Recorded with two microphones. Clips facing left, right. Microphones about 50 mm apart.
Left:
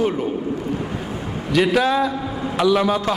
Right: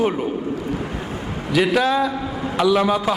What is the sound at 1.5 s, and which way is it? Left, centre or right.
A man's voice, centre.